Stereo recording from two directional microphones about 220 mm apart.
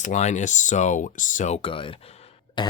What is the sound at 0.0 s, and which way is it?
Speech, 30° left (ahead or behind).